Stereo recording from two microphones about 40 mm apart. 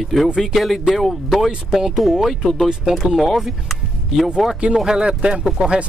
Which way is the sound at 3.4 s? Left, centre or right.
Centre.